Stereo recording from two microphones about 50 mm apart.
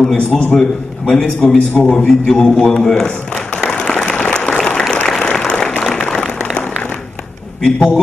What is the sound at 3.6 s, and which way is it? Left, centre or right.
Applause, left.